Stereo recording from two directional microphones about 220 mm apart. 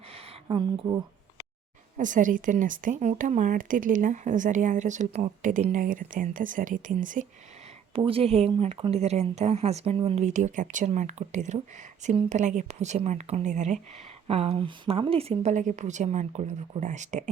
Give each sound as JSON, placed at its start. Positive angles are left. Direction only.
{"t": 0.1, "sound": "a sound", "side_deg": -25}
{"t": 2.0, "sound": "speech", "side_deg": -35}
{"t": 7.9, "sound": "speech", "side_deg": -25}